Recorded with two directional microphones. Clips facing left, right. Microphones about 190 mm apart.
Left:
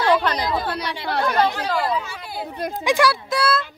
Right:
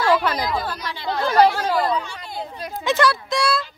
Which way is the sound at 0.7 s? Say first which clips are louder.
Left 1 dB; 70° left (ahead or behind).